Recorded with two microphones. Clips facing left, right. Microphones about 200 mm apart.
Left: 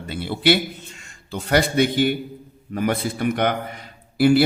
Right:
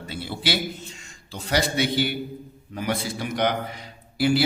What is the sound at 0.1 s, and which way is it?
A man's voice, 60° left (ahead or behind).